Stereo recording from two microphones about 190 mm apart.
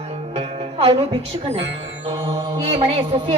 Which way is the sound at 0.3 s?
30° right (ahead or behind).